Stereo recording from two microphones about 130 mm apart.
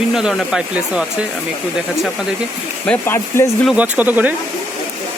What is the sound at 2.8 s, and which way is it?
Speech, 10° left (ahead or behind).